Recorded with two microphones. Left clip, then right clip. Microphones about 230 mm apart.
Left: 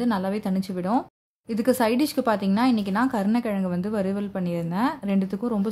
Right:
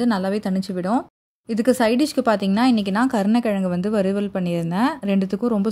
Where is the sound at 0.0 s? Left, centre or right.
Right.